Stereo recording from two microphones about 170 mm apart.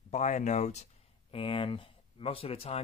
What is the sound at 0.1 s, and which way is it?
Speech, 45° left (ahead or behind).